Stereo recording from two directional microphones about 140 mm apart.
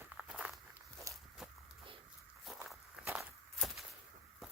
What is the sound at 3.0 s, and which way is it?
Walk, 15° right (ahead or behind).